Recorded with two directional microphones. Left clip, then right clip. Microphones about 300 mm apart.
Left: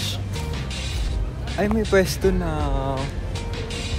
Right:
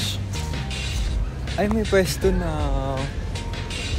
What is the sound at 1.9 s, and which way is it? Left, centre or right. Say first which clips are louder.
Speech: left 1 dB; centre.